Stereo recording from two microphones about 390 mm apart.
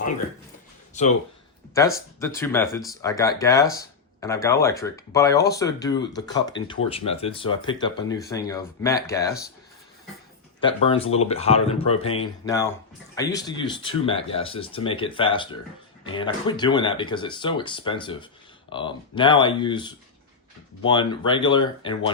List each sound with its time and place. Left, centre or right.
1.0 s speech: centre
1.7 s speech: centre
10.6 s speech: centre